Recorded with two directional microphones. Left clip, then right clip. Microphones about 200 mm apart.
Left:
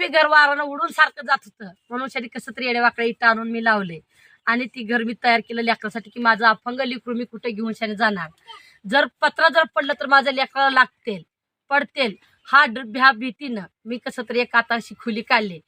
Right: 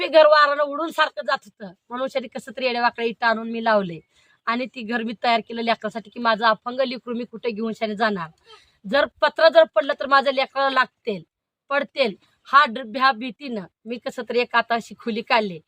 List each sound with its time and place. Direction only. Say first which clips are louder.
0.0 s a woman's voice: right 1 dB; 35° right (ahead or behind)